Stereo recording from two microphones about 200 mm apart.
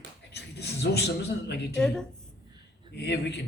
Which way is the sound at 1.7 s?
5° left (ahead or behind).